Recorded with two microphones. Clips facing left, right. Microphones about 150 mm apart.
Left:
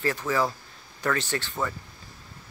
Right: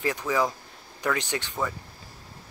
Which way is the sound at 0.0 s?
15° right (ahead or behind).